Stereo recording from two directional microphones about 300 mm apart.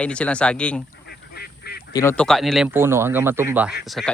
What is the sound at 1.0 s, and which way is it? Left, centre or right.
Goose, left.